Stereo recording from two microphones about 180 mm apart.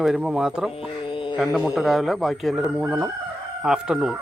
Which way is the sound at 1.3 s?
5° right (ahead or behind).